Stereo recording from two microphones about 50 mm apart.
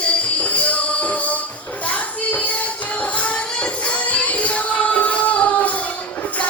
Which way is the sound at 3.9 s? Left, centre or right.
Left.